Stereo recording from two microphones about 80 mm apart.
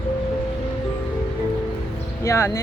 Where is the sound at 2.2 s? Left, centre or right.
Left.